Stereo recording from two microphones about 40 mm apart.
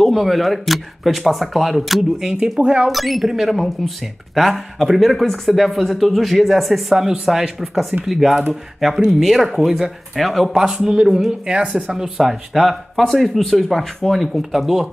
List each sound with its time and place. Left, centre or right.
0.0 s speech: centre
2.6 s speech: right
2.9 s speech: centre
5.2 s speech: centre
5.5 s speech: centre
7.0 s speech: centre
10.5 s speech: centre